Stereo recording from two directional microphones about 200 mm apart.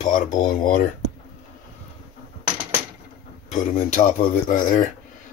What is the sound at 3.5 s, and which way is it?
Speech, 40° left (ahead or behind).